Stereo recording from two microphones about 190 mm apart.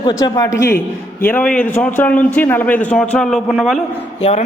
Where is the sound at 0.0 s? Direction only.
20° left (ahead or behind); by 3.8 s centre (ahead or behind).